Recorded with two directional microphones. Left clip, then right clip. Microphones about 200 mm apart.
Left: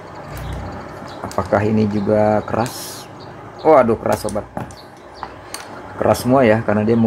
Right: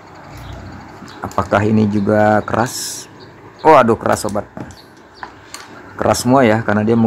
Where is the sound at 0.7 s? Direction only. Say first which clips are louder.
Left 4 dB; centre (ahead or behind).